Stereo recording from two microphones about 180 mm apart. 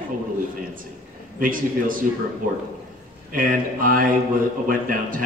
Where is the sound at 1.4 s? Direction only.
50° right (ahead or behind).